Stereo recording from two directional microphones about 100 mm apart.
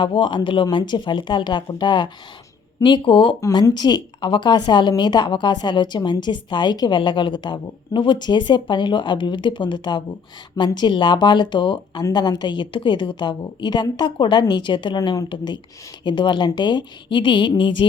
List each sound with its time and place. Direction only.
0.0 s a woman's voice: 55° left (ahead or behind)
3.8 s a woman's voice: 45° left (ahead or behind)